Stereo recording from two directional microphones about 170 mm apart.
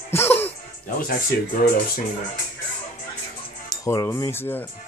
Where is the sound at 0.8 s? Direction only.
55° left (ahead or behind).